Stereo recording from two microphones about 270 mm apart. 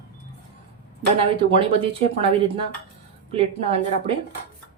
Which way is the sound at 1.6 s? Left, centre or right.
Centre.